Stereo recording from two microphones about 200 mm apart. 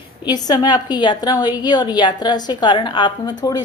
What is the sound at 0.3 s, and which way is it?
A woman's voice, 20° left (ahead or behind).